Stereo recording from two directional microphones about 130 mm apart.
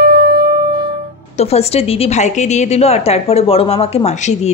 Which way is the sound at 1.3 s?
55° left (ahead or behind).